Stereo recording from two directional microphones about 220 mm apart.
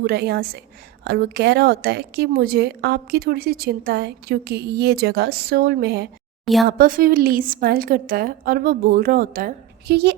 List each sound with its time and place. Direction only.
0.0 s a woman's voice: 45° right (ahead or behind)
6.4 s speech: centre (ahead or behind)
6.7 s a woman's voice: 40° right (ahead or behind)